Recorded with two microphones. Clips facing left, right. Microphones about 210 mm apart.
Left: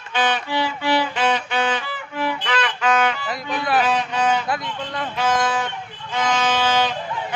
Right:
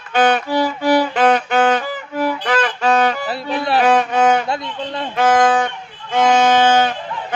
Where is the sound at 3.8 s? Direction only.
50° right (ahead or behind).